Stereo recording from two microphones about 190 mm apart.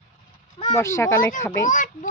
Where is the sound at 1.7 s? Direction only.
45° left (ahead or behind).